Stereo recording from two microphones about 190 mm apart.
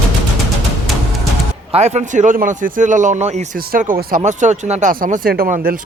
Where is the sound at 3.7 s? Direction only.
50° right (ahead or behind).